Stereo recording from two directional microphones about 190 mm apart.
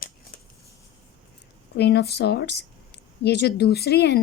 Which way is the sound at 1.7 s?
60° left (ahead or behind).